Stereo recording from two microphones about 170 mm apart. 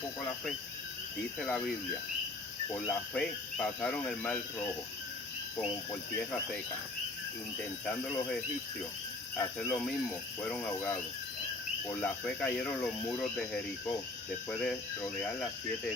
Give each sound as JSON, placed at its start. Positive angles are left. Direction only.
{"t": 1.4, "sound": "speech", "side_deg": 5}
{"t": 2.9, "sound": "cricket", "side_deg": 5}
{"t": 5.5, "sound": "cricket", "side_deg": 10}
{"t": 7.9, "sound": "cricket", "side_deg": 5}
{"t": 9.4, "sound": "cricket", "side_deg": 10}
{"t": 11.9, "sound": "speech", "side_deg": 5}
{"t": 15.2, "sound": "cricket", "side_deg": 5}